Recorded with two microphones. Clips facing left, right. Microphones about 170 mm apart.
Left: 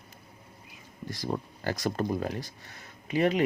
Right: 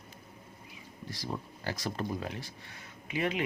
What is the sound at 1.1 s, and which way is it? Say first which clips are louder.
Speech: left 6 dB; 50° left (ahead or behind).